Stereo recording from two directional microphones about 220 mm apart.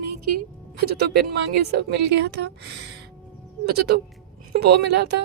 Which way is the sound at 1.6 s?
50° right (ahead or behind).